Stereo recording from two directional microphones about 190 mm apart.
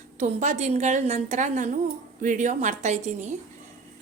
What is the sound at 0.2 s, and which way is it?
A woman's voice, 40° right (ahead or behind).